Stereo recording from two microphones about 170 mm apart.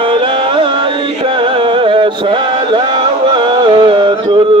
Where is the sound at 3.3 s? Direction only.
30° right (ahead or behind).